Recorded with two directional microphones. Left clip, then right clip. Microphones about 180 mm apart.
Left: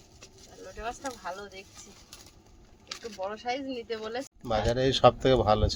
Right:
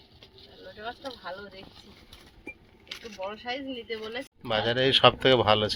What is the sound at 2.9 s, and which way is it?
Vehicle, 30° left (ahead or behind).